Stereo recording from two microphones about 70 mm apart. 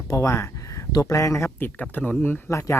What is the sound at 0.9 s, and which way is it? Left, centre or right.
Speech, left.